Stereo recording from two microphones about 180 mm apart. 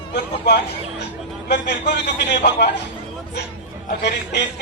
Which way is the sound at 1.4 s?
70° left (ahead or behind).